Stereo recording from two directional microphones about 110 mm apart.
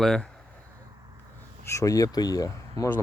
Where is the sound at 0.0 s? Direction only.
5° left (ahead or behind).